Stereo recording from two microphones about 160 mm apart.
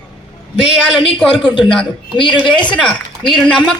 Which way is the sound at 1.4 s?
30° left (ahead or behind).